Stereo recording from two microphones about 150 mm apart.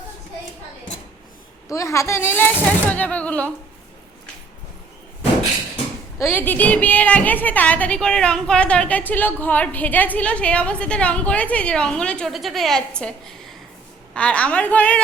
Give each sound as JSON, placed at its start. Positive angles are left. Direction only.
{"t": 1.6, "sound": "a woman's voice", "side_deg": 20}
{"t": 6.1, "sound": "a woman's voice", "side_deg": 15}